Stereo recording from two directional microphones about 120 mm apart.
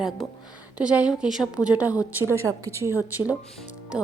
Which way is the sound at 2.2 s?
20° right (ahead or behind).